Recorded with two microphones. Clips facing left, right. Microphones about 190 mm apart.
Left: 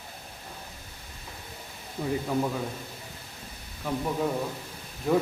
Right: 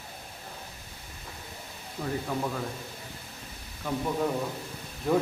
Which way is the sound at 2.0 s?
15° left (ahead or behind).